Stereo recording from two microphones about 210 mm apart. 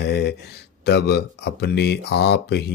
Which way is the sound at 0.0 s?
50° left (ahead or behind).